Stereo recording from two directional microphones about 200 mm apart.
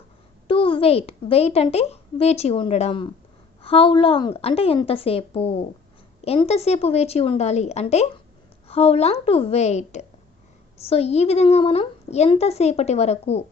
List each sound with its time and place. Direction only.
0.4 s a woman's voice: 25° left (ahead or behind)